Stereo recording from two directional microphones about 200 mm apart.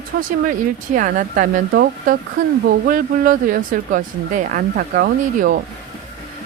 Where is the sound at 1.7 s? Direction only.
55° right (ahead or behind).